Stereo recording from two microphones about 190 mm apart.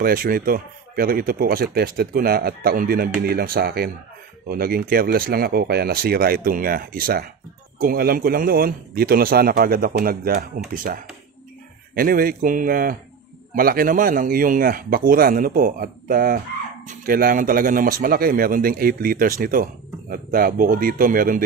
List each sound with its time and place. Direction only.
0.0 s speech: 50° right (ahead or behind)